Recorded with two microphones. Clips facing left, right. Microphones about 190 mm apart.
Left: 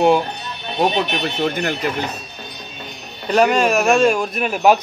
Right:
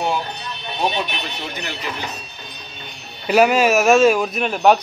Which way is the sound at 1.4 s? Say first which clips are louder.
Left 10 dB; 50° left (ahead or behind).